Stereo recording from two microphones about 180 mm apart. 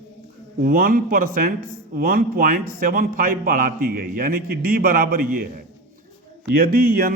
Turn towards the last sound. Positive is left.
turn(degrees=-55)  # may be behind; listen again after turning